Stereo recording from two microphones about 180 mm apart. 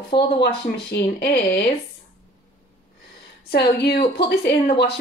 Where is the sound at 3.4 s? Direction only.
65° left (ahead or behind).